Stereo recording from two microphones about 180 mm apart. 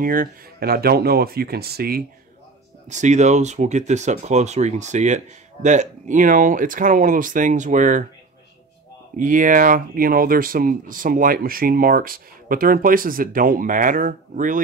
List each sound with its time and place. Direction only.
0.0 s speech: 50° right (ahead or behind)
2.9 s speech: 40° right (ahead or behind)
9.2 s speech: 50° right (ahead or behind)